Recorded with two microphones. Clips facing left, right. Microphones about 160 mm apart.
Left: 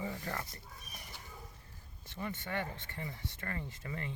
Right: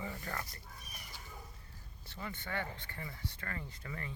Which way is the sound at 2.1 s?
20° left (ahead or behind).